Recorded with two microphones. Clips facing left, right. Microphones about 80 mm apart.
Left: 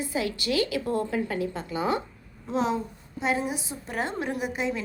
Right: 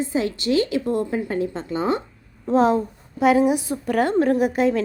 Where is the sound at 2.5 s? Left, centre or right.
Right.